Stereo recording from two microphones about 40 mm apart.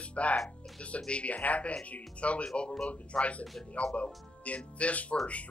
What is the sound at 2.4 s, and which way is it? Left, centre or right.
Speech, centre.